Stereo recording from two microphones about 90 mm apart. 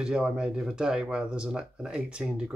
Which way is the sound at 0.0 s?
10° right (ahead or behind).